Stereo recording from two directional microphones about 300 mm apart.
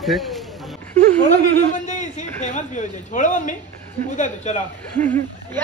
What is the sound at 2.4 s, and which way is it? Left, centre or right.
Speech, left.